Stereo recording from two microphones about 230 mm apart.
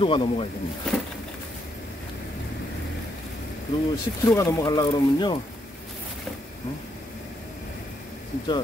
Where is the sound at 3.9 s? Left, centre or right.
Centre.